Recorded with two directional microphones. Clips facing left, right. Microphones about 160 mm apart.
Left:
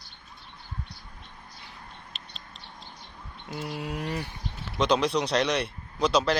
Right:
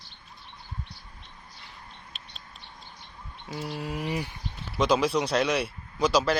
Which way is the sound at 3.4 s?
Centre (ahead or behind).